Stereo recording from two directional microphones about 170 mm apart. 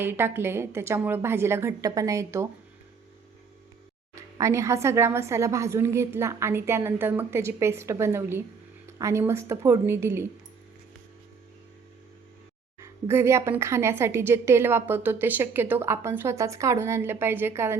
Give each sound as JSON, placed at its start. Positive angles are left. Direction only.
{"t": 0.0, "sound": "speech", "side_deg": -15}
{"t": 4.1, "sound": "speech", "side_deg": -15}
{"t": 12.8, "sound": "speech", "side_deg": -15}